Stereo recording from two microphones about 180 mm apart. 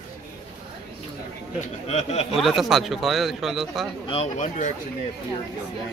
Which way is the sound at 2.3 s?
Centre (ahead or behind).